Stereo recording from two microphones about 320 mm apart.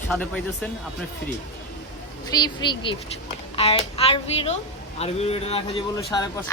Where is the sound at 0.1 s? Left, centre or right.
Centre.